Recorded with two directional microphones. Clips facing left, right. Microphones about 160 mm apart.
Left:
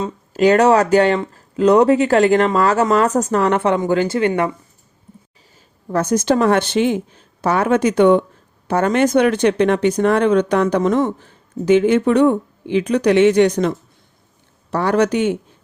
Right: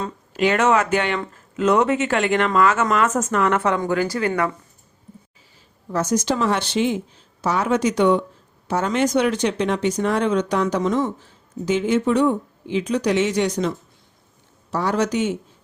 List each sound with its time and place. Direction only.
0.3 s a woman's voice: 40° left (ahead or behind)
5.9 s speech: 55° left (ahead or behind)